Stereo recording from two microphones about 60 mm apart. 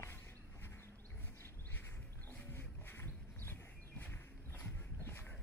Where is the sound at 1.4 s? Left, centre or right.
Left.